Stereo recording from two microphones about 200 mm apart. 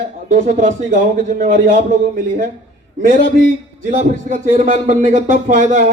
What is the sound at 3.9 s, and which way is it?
A man's voice, 40° right (ahead or behind).